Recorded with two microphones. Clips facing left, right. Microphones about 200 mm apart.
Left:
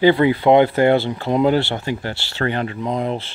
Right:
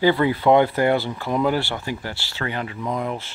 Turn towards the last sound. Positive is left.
turn(degrees=30)  # may be behind; listen again after turning